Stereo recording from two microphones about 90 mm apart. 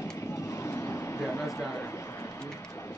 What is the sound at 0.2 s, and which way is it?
Vehicle, 35° left (ahead or behind).